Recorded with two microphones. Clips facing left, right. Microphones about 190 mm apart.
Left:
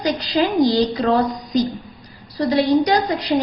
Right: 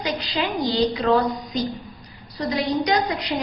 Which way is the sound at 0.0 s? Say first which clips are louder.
Left 6 dB; 40° left (ahead or behind).